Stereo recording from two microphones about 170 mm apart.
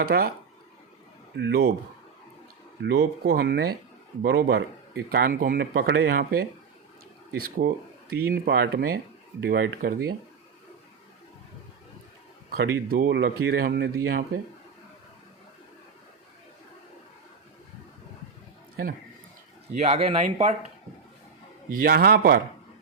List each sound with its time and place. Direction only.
0.0 s speech: 60° right (ahead or behind)
1.4 s speech: 80° right
2.8 s speech: 70° right (ahead or behind)
12.5 s speech: 65° right (ahead or behind)
19.8 s speech: 35° right (ahead or behind)
21.7 s speech: 60° right (ahead or behind)